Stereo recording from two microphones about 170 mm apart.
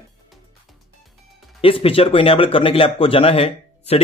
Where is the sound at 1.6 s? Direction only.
35° left (ahead or behind).